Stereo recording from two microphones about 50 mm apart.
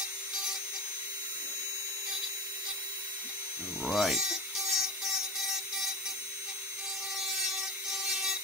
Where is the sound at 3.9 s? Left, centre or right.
Centre.